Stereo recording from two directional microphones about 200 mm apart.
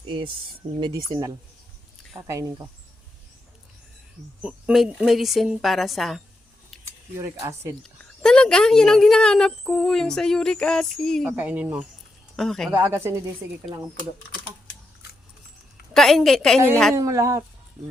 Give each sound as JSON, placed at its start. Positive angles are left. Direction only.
{"t": 0.8, "sound": "speech", "side_deg": -20}
{"t": 4.4, "sound": "speech", "side_deg": -5}
{"t": 6.8, "sound": "speech", "side_deg": -15}
{"t": 7.8, "sound": "speech", "side_deg": 5}
{"t": 11.3, "sound": "speech", "side_deg": -10}
{"t": 12.7, "sound": "speech", "side_deg": -15}
{"t": 15.9, "sound": "speech", "side_deg": 0}
{"t": 16.9, "sound": "speech", "side_deg": -15}